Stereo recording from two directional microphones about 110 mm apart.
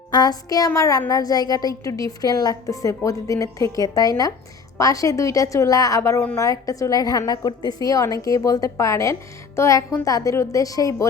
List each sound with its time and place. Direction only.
0.1 s a woman's voice: 40° left (ahead or behind)